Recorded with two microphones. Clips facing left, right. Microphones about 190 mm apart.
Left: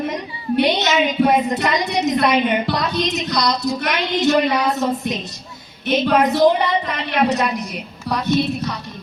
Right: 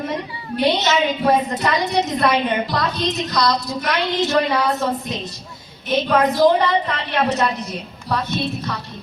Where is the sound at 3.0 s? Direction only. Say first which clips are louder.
Even; 20° left (ahead or behind).